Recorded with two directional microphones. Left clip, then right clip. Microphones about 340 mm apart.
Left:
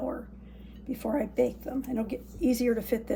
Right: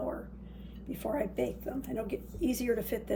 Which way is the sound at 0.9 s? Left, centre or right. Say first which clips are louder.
Left 3 dB; centre.